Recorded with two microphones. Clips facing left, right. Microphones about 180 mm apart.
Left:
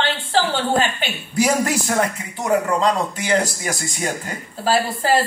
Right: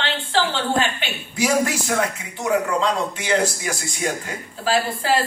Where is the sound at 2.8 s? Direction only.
40° left (ahead or behind).